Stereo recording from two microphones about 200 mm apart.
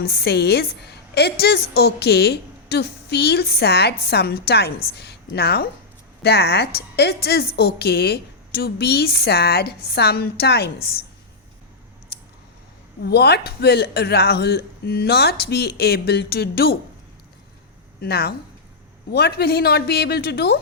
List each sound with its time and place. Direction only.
0.0 s a woman's voice: 50° left (ahead or behind)
13.1 s a woman's voice: 55° left (ahead or behind)
18.0 s a woman's voice: 50° left (ahead or behind)